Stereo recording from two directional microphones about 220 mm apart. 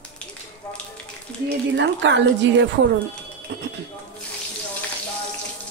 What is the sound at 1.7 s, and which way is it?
A woman's voice, 55° right (ahead or behind).